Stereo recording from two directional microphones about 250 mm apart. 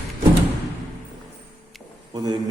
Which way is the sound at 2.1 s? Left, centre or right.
Centre.